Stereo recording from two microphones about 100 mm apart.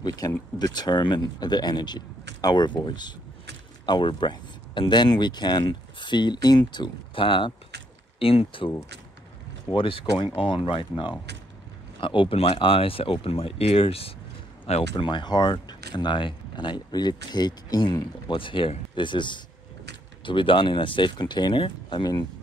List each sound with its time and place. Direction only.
0.0 s speech: 40° left (ahead or behind); by 7.5 s 60° left (ahead or behind)
8.2 s speech: 70° left (ahead or behind)
15.0 s speech: 50° left (ahead or behind)
18.3 s speech: 60° left (ahead or behind)